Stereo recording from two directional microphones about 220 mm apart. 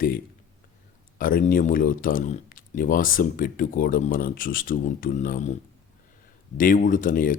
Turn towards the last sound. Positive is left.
turn(degrees=40)  # may be behind; listen again after turning